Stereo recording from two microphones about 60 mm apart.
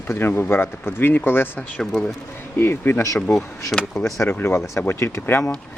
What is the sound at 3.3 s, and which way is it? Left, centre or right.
Speech, left.